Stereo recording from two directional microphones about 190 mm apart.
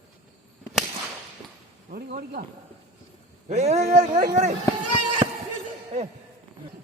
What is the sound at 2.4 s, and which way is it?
Speech, 45° right (ahead or behind).